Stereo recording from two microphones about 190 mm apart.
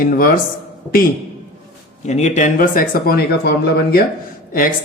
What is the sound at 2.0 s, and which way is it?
Speech, 35° left (ahead or behind).